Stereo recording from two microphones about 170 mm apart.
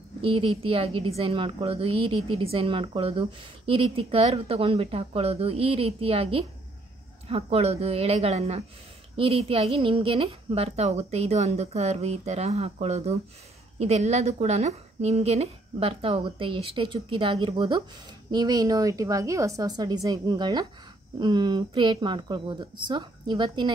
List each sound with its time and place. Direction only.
0.2 s a woman's voice: 30° right (ahead or behind)